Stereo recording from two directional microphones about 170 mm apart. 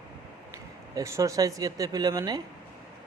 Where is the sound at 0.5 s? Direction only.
20° right (ahead or behind).